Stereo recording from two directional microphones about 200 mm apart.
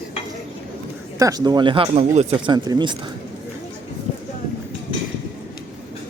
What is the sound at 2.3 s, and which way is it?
Speech, 20° right (ahead or behind).